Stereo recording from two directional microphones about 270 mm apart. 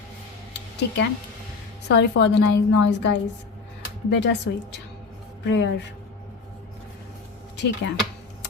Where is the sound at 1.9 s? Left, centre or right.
Left.